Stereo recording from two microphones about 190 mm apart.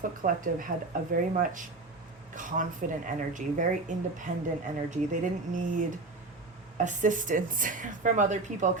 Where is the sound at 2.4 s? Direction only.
45° right (ahead or behind).